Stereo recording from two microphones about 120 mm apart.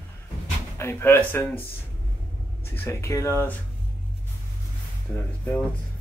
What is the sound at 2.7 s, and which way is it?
Speech, 20° left (ahead or behind).